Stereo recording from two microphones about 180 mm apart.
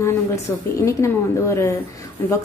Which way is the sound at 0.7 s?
15° left (ahead or behind).